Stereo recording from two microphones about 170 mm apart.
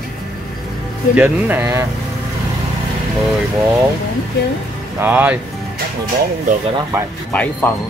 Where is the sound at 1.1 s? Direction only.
10° right (ahead or behind).